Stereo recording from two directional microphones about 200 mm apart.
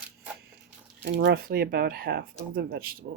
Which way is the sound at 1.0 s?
60° right (ahead or behind).